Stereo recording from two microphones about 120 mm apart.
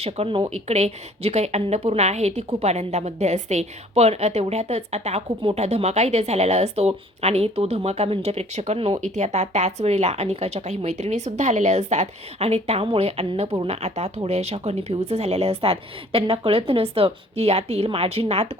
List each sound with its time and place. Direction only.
0.0 s a woman's voice: 50° right (ahead or behind)